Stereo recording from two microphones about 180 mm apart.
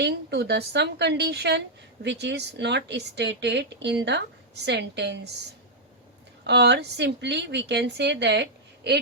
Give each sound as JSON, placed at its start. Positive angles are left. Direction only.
{"t": 0.0, "sound": "speech", "side_deg": -65}
{"t": 6.4, "sound": "speech", "side_deg": -70}